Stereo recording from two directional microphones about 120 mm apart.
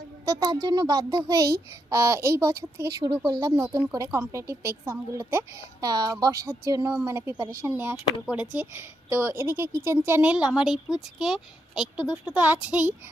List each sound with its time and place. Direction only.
0.3 s a child's voice: 30° right (ahead or behind)
5.8 s a child's voice: 30° right (ahead or behind); by 12.9 s 10° right (ahead or behind)